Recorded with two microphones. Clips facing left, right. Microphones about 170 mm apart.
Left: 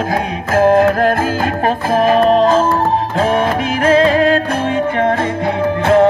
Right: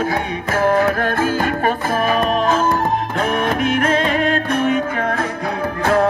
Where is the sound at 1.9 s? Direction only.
35° left (ahead or behind).